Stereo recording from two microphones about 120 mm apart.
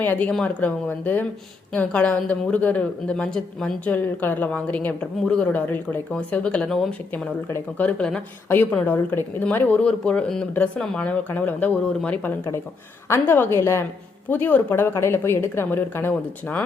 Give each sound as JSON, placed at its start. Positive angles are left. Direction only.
{"t": 0.0, "sound": "speech", "side_deg": 15}
{"t": 7.1, "sound": "a woman's voice", "side_deg": 15}